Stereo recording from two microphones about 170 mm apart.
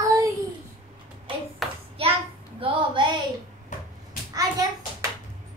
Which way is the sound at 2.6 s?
30° right (ahead or behind).